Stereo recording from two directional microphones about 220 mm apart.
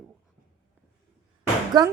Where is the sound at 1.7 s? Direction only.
20° right (ahead or behind).